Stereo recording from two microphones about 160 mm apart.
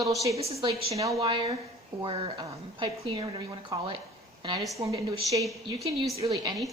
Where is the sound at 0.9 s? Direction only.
20° right (ahead or behind).